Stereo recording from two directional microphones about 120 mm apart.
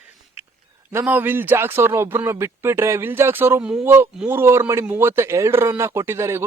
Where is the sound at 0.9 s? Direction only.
15° right (ahead or behind).